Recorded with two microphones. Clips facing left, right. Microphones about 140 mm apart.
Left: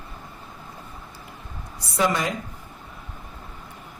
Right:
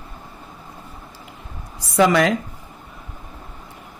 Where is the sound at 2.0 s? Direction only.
85° right.